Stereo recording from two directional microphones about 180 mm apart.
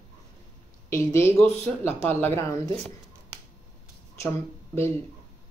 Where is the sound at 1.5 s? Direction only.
35° right (ahead or behind).